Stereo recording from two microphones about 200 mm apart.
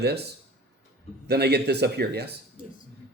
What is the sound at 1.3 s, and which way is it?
Speech, 55° right (ahead or behind).